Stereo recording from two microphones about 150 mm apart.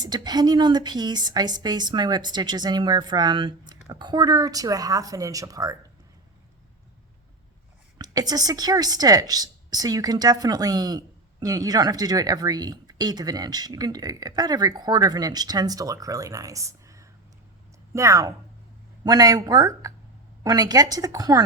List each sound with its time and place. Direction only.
0.0 s a woman's voice: 25° right (ahead or behind)
7.9 s a woman's voice: 25° right (ahead or behind)